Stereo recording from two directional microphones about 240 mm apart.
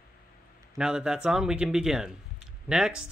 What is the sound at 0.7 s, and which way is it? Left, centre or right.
Speech, centre.